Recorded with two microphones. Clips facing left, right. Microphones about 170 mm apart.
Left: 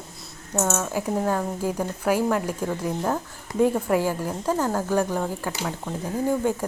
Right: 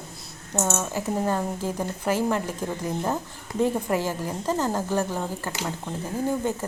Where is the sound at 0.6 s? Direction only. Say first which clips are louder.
Left 1 dB; 10° right (ahead or behind).